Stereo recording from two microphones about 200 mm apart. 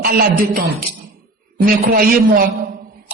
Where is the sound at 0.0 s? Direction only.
50° right (ahead or behind).